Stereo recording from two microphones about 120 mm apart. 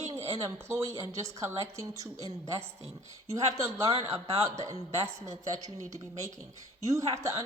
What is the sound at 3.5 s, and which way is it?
Speech, 25° right (ahead or behind).